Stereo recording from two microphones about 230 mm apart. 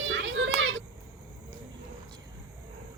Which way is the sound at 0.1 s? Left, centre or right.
Right.